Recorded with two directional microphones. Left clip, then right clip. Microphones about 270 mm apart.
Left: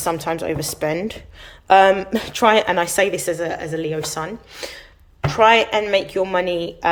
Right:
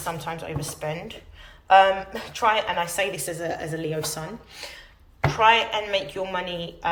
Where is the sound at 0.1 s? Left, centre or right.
Left.